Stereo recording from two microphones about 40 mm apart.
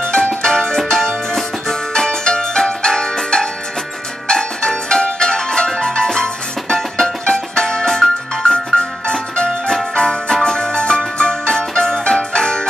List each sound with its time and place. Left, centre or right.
0.0 s music: left